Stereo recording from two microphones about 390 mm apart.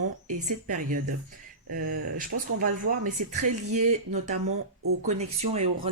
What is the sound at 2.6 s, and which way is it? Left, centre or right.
Speech, centre.